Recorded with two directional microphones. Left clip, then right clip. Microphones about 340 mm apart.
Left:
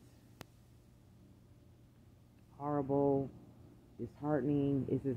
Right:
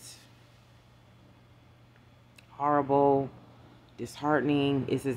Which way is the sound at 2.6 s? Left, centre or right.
Centre.